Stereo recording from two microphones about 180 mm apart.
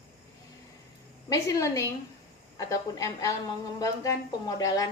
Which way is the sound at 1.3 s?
20° left (ahead or behind).